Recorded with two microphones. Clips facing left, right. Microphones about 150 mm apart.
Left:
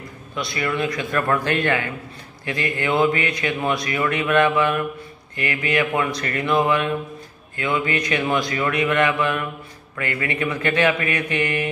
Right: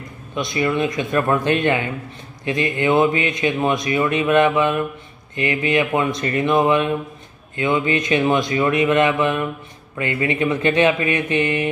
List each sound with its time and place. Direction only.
0.4 s speech: 20° right (ahead or behind)